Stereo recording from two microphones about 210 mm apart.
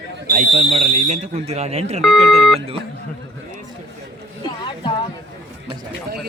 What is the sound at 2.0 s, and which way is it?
Speech, centre (ahead or behind).